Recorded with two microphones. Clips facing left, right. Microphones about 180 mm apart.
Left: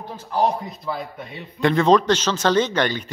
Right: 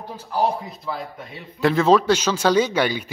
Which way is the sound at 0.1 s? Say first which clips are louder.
Left 1 dB; 10° right (ahead or behind).